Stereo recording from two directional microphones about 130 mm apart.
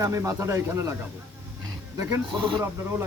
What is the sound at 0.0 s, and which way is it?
Speech, 25° right (ahead or behind).